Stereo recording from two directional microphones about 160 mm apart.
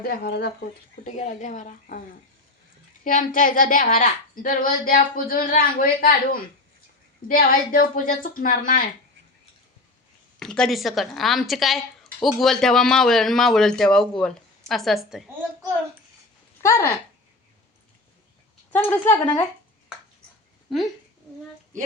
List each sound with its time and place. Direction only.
0.0 s speech: 75° left (ahead or behind)
1.0 s a woman's voice: 50° left (ahead or behind)
10.4 s a woman's voice: 5° left (ahead or behind)
16.6 s speech: 20° left (ahead or behind)
18.7 s speech: 15° left (ahead or behind)